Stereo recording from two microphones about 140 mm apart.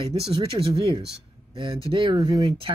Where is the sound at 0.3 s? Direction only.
40° right (ahead or behind).